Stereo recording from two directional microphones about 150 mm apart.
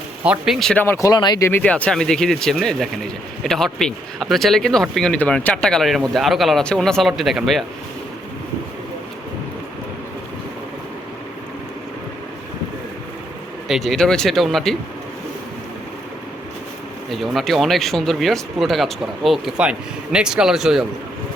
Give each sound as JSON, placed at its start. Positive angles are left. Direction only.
{"t": 0.3, "sound": "speech", "side_deg": 0}
{"t": 1.0, "sound": "speech", "side_deg": 30}
{"t": 1.5, "sound": "speech", "side_deg": 10}
{"t": 13.7, "sound": "speech", "side_deg": 0}
{"t": 17.1, "sound": "speech", "side_deg": 0}